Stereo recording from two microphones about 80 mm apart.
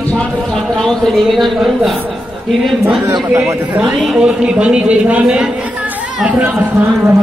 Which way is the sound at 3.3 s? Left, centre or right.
Right.